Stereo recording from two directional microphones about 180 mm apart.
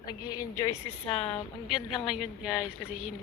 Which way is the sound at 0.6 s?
30° left (ahead or behind).